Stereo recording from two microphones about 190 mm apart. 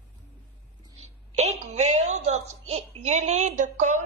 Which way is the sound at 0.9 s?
35° right (ahead or behind).